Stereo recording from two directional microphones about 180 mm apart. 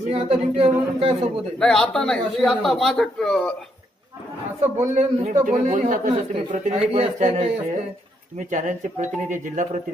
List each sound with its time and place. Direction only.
0.1 s a woman's voice: 30° right (ahead or behind)
1.6 s speech: 5° left (ahead or behind)
4.7 s a man's voice: 40° right (ahead or behind)